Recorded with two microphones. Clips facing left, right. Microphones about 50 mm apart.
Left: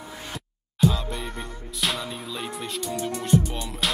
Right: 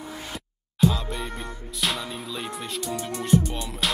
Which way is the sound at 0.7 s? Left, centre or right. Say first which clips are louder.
Even; centre.